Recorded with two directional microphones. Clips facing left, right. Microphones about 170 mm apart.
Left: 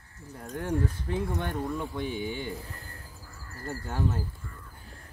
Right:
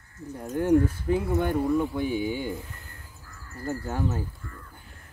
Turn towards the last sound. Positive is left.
turn(degrees=-5)  # may be behind; listen again after turning